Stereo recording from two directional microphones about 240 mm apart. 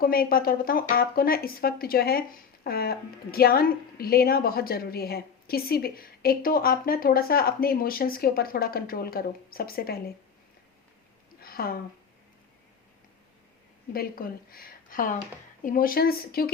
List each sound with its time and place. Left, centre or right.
0.0 s speech: left
11.3 s a sound: left
13.9 s speech: left